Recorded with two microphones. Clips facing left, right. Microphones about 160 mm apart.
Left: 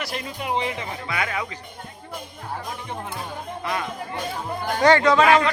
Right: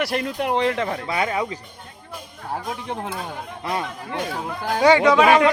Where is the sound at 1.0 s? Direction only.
35° right (ahead or behind).